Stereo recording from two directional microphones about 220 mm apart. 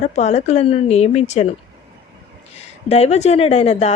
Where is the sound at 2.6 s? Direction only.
30° left (ahead or behind).